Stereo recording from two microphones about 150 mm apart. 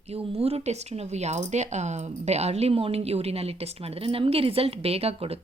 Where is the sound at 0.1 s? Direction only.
40° right (ahead or behind).